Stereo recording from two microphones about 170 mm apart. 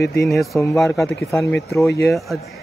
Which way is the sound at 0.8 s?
15° left (ahead or behind).